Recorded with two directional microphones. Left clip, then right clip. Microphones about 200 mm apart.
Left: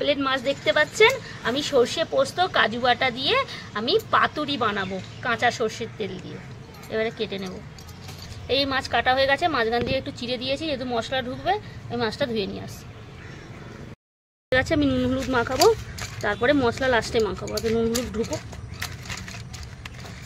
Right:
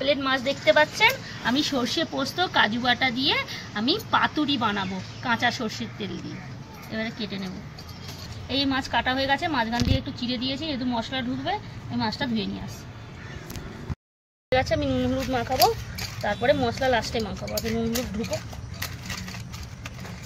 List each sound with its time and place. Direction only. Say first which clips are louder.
0.0 s speech: left 1 dB; 50° left (ahead or behind)
8.5 s speech: left 3 dB; 60° left (ahead or behind)
14.5 s speech: left 2 dB; 60° left (ahead or behind)